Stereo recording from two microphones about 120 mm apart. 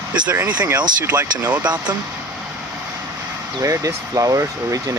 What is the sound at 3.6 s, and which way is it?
Speech, 25° right (ahead or behind).